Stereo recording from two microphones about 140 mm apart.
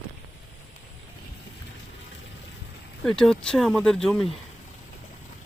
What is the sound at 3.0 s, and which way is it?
A man's voice, 5° left (ahead or behind).